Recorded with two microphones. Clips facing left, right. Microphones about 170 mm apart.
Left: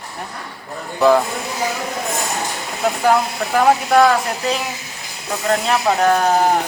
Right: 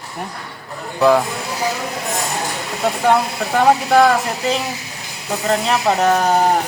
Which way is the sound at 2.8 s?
Centre (ahead or behind).